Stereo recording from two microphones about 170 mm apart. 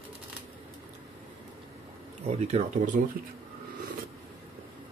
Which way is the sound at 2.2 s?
45° right (ahead or behind).